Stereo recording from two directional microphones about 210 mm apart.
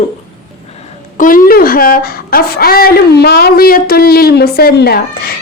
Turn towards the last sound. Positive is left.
turn(degrees=45)  # may be behind; listen again after turning